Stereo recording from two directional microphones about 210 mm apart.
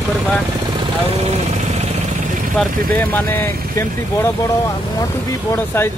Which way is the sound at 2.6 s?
10° left (ahead or behind).